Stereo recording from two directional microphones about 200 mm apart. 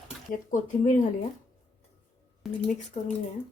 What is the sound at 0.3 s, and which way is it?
Speech, 40° left (ahead or behind).